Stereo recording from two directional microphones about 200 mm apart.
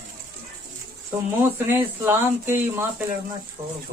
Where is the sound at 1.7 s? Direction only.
10° right (ahead or behind).